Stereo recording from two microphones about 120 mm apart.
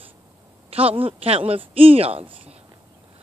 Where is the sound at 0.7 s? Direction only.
55° right (ahead or behind).